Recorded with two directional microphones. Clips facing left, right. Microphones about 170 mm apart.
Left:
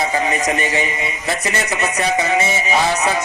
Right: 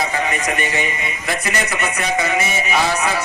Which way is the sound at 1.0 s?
25° left (ahead or behind).